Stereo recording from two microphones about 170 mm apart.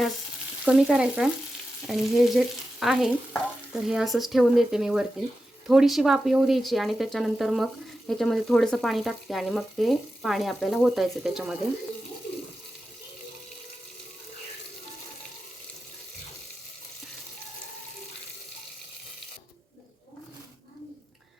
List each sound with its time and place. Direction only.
0.6 s speech: 5° right (ahead or behind)